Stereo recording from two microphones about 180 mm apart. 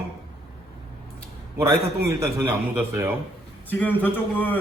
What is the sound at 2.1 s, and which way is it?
Speech, 15° right (ahead or behind).